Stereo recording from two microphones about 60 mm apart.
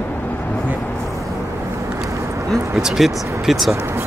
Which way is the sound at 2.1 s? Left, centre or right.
Right.